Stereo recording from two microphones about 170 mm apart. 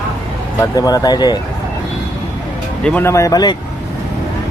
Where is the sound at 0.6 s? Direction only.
20° left (ahead or behind).